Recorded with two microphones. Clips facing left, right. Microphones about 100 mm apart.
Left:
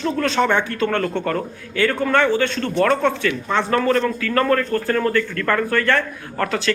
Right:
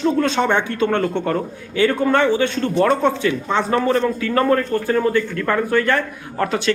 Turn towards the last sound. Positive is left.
turn(degrees=-20)  # may be behind; listen again after turning